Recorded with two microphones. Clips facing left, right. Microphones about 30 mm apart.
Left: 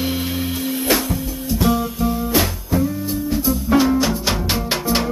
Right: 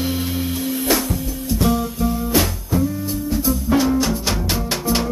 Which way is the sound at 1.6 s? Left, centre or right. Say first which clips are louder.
Left 1 dB; centre.